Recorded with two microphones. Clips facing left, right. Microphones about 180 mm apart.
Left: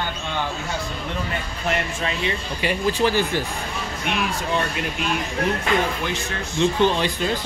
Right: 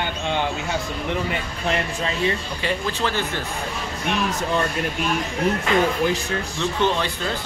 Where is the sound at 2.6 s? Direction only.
10° left (ahead or behind).